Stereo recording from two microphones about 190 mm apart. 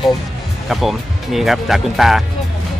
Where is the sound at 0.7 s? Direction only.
Centre (ahead or behind).